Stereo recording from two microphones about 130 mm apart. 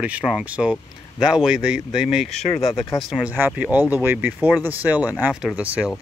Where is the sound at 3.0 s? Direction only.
Centre (ahead or behind).